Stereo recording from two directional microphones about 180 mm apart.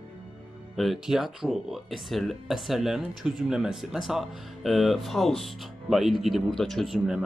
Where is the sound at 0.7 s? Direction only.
Centre (ahead or behind).